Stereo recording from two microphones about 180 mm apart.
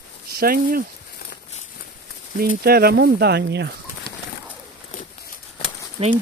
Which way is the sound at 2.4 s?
60° right (ahead or behind).